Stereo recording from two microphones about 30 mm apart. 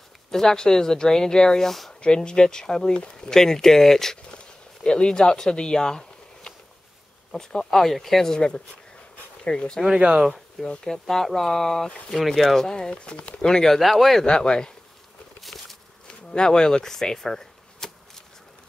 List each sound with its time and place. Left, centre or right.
0.3 s speech: centre
4.8 s speech: left
7.9 s speech: centre
8.3 s speech: left
9.9 s speech: right
10.8 s speech: centre
12.5 s speech: left
13.4 s speech: centre
13.7 s speech: centre
14.2 s speech: left
15.4 s a sound: centre
16.1 s a sound: left